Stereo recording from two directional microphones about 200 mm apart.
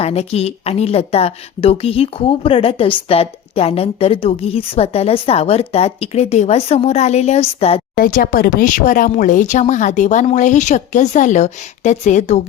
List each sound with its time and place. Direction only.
0.0 s a woman's voice: 30° left (ahead or behind)
7.9 s speech: 45° left (ahead or behind)